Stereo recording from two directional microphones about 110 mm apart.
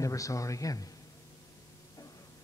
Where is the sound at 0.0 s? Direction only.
30° left (ahead or behind).